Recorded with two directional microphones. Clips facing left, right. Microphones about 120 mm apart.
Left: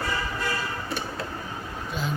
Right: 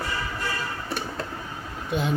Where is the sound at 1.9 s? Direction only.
60° right (ahead or behind).